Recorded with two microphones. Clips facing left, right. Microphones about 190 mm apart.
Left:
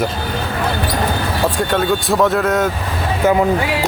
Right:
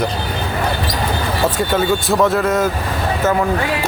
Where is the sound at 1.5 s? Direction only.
Centre (ahead or behind).